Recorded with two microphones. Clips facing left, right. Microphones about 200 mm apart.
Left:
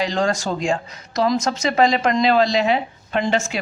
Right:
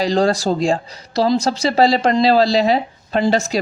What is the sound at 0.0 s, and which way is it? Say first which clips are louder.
Speech: right 5 dB; 35° right (ahead or behind).